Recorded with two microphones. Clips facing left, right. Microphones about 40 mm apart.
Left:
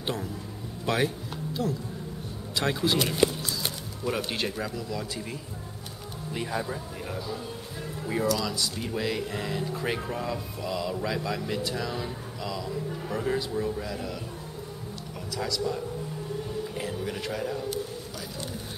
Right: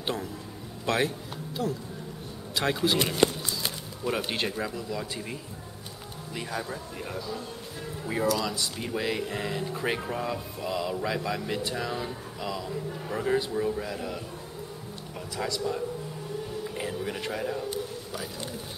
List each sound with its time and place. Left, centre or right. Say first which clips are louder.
0.0 s a man's voice: even; centre
4.2 s speech: even; centre
6.4 s speech: left 2 dB; centre
15.3 s a man's voice: even; right
16.6 s a sound: even; centre